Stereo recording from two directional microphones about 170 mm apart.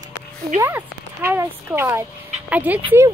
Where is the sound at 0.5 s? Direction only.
15° right (ahead or behind).